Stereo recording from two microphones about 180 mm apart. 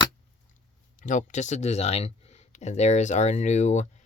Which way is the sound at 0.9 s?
45° left (ahead or behind).